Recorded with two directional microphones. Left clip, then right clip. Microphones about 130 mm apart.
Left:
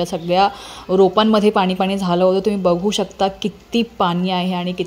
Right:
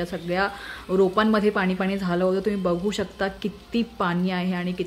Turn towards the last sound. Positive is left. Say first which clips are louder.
# left 8 dB
turn(degrees=20)  # may be behind; listen again after turning